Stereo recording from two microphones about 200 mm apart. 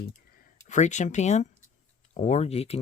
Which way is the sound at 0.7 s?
35° left (ahead or behind).